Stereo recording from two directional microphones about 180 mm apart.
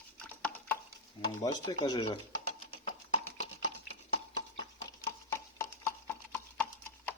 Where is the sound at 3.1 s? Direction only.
40° left (ahead or behind).